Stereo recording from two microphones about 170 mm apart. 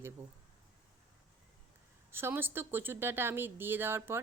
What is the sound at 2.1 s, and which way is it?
Speech, 15° right (ahead or behind).